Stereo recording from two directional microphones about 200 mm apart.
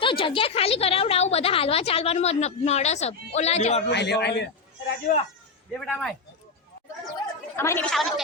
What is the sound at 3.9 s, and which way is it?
Speech, 55° left (ahead or behind).